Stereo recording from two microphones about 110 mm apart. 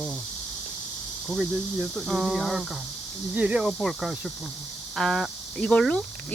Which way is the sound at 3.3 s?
10° right (ahead or behind).